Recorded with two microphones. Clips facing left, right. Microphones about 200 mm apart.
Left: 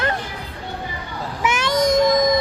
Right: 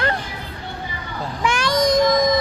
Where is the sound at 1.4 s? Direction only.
20° left (ahead or behind).